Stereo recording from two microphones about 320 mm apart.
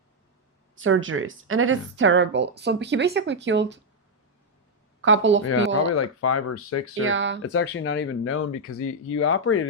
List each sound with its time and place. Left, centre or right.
0.8 s a woman's voice: right
5.0 s a woman's voice: right
5.9 s speech: left
7.0 s a woman's voice: right
7.4 s speech: left